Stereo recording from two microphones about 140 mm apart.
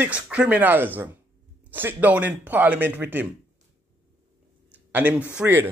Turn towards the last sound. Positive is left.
turn(degrees=-15)  # may be behind; listen again after turning